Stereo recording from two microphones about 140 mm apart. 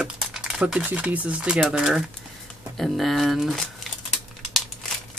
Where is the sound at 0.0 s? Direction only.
5° right (ahead or behind).